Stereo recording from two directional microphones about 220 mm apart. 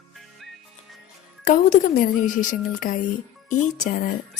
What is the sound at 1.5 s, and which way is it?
A woman's voice, 35° left (ahead or behind).